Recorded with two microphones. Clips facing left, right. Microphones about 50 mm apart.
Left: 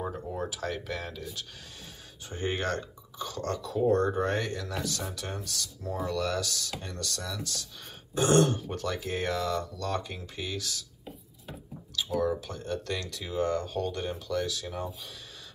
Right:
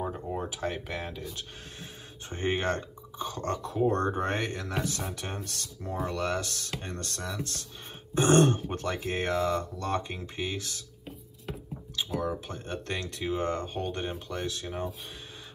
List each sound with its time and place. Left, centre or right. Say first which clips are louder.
0.4 s speech: left 2 dB; centre
2.2 s speech: right 2 dB; right
12.2 s speech: left 3 dB; right